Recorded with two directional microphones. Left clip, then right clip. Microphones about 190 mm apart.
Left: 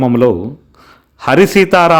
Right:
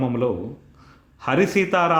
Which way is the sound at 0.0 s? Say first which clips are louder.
Left 12 dB; 40° left (ahead or behind).